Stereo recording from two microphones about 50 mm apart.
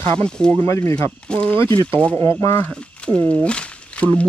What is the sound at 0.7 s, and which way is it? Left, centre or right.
Speech, left.